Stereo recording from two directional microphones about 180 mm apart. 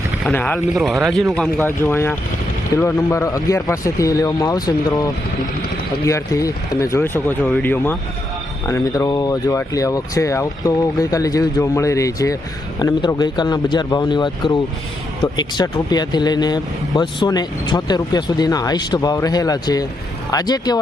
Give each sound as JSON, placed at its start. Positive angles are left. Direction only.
{"t": 0.3, "sound": "speech", "side_deg": 10}
{"t": 1.6, "sound": "speech", "side_deg": 10}
{"t": 6.1, "sound": "speech", "side_deg": 15}